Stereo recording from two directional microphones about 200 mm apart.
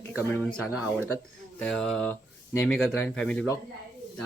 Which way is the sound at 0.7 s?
5° right (ahead or behind).